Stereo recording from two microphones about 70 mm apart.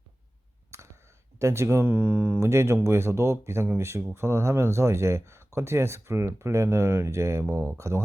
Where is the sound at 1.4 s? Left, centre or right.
Right.